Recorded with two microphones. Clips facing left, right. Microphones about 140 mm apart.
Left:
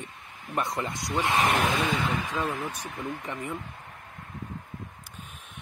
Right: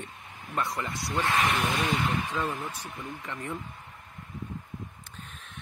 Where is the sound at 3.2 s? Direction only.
15° left (ahead or behind).